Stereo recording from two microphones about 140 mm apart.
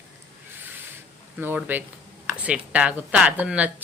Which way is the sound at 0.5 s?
15° right (ahead or behind).